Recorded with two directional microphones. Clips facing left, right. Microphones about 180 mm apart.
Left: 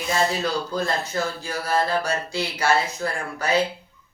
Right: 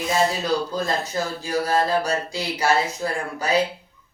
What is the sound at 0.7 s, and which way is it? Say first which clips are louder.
Speech: even; 20° right (ahead or behind).